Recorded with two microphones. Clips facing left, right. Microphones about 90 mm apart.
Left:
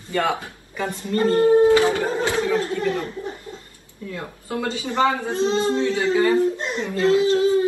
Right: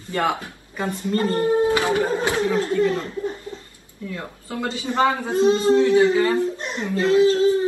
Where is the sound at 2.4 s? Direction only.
25° right (ahead or behind).